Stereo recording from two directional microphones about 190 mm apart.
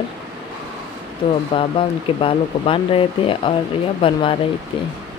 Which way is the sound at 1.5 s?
30° left (ahead or behind).